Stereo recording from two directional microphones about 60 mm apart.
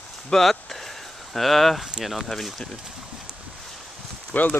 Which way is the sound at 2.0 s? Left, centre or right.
Centre.